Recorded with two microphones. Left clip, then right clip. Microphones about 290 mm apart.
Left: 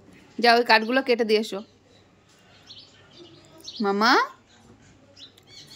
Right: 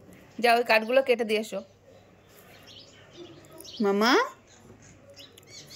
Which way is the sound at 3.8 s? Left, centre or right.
Centre.